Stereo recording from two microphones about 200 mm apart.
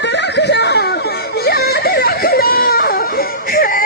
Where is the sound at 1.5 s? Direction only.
50° left (ahead or behind).